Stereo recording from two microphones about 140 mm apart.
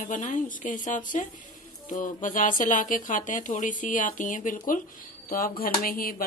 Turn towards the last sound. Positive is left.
turn(degrees=90)